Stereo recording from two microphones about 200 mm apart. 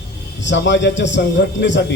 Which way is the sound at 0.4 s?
65° left (ahead or behind).